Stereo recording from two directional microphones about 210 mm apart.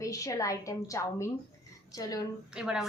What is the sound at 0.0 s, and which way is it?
A woman's voice, 15° left (ahead or behind).